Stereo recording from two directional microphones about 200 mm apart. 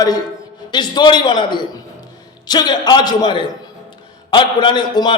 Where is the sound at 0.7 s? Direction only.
20° left (ahead or behind).